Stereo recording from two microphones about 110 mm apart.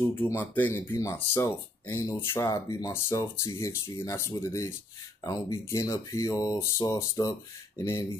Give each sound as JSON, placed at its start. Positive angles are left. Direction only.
{"t": 0.1, "sound": "speech", "side_deg": 20}
{"t": 2.9, "sound": "speech", "side_deg": 25}